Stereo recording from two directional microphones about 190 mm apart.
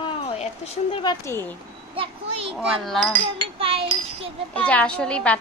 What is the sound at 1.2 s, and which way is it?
Speech, 15° left (ahead or behind).